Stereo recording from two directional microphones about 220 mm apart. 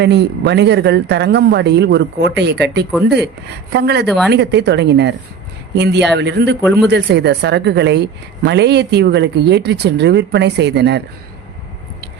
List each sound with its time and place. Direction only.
0.0 s a woman's voice: 50° right (ahead or behind)